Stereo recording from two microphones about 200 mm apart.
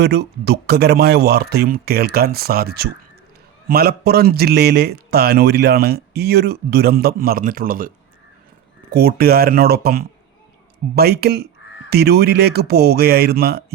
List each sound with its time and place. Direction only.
0.0 s a man's voice: 55° right (ahead or behind)